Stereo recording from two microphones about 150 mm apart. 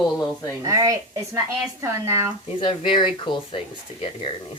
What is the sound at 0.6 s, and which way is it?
Speech, 25° right (ahead or behind).